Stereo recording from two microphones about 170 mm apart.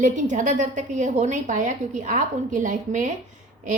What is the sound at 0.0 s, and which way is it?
A woman's voice, 50° right (ahead or behind).